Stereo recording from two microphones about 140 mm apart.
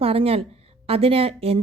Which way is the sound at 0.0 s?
45° right (ahead or behind).